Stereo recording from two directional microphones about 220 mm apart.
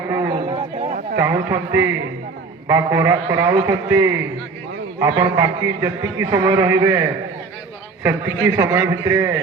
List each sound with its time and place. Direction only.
0.1 s chatter: 25° right (ahead or behind)
1.2 s a man's voice: 10° right (ahead or behind)